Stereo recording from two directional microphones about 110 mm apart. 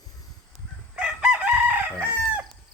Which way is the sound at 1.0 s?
5° right (ahead or behind).